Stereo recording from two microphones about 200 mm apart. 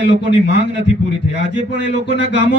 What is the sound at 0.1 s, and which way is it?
Speech, 60° left (ahead or behind).